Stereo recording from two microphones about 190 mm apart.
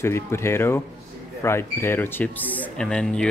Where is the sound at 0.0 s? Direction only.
15° left (ahead or behind).